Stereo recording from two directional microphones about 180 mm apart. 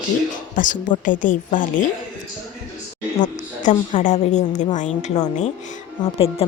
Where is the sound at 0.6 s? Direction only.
45° left (ahead or behind).